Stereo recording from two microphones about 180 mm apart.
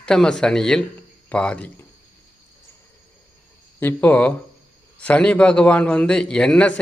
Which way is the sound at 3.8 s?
10° left (ahead or behind).